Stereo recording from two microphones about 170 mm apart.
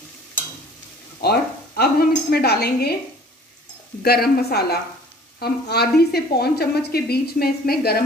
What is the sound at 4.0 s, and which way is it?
A woman's voice, 65° left (ahead or behind).